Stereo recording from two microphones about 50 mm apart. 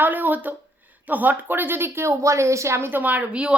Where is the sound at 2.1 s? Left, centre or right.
Right.